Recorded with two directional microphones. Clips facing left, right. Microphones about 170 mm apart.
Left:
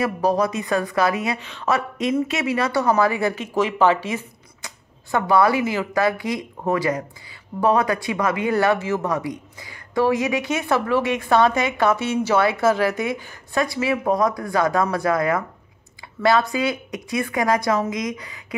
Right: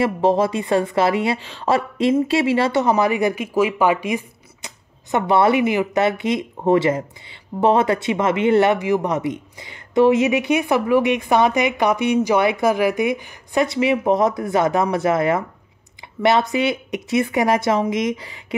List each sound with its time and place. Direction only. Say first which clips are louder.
0.0 s speech: right 3 dB; 25° right (ahead or behind)